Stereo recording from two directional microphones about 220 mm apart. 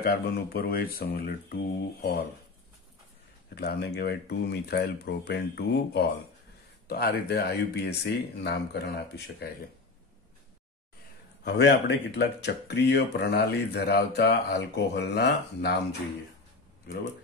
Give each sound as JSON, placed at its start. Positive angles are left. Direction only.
{"t": 0.0, "sound": "speech", "side_deg": 45}
{"t": 3.5, "sound": "speech", "side_deg": 50}
{"t": 11.4, "sound": "speech", "side_deg": 50}
{"t": 16.8, "sound": "speech", "side_deg": 35}